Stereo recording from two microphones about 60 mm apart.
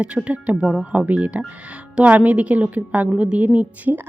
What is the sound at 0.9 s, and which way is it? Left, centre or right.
A woman's voice, right.